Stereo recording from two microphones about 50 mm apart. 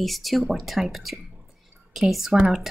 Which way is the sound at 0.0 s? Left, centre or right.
Centre.